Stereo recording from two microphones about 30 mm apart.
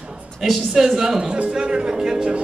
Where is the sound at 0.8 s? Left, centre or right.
Centre.